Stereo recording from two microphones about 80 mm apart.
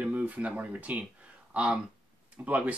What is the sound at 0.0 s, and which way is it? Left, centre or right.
Speech, centre.